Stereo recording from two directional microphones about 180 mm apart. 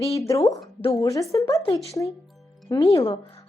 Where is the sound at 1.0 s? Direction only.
20° left (ahead or behind).